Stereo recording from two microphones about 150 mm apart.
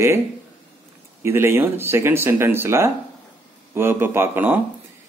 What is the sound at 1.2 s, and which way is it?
Speech, 15° right (ahead or behind).